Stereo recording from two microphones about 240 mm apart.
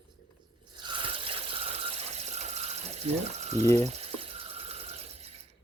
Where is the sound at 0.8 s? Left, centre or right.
Centre.